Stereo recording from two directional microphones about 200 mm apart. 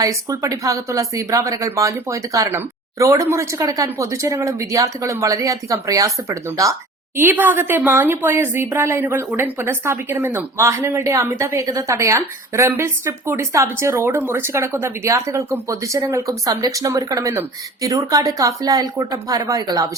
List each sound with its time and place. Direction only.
0.0 s a woman's voice: 15° right (ahead or behind)